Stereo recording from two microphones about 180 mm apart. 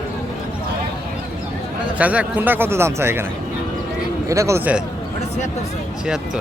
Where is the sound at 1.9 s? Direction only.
10° right (ahead or behind).